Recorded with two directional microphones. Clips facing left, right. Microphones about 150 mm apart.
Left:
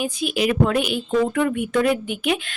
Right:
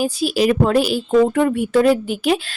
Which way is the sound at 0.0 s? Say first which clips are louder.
Right 5 dB; 35° right (ahead or behind).